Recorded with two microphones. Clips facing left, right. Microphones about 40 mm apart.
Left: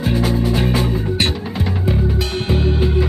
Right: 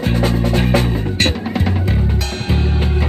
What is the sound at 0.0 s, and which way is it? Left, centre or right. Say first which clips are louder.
Music: right 1 dB; right.